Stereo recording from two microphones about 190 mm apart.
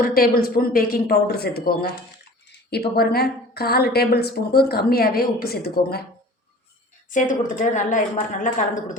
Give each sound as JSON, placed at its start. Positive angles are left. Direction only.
{"t": 0.0, "sound": "a man's voice", "side_deg": 50}
{"t": 7.1, "sound": "a man's voice", "side_deg": 45}